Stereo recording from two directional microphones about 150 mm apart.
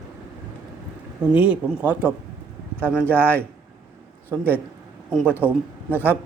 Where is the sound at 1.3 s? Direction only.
10° right (ahead or behind).